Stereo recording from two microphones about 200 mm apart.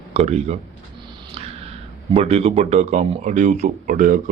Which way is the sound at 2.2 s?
30° right (ahead or behind).